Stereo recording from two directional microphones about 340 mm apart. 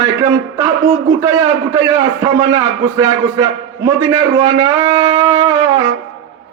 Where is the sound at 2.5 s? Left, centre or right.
Centre.